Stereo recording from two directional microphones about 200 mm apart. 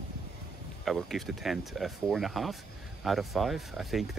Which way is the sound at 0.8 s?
Centre (ahead or behind).